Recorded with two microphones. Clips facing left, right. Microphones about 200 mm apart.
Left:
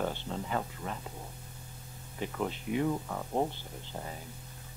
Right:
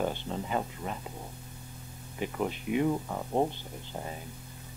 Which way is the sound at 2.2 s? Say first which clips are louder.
Right 2 dB; 15° right (ahead or behind).